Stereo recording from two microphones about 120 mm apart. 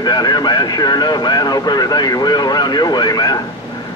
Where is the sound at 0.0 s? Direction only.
35° left (ahead or behind).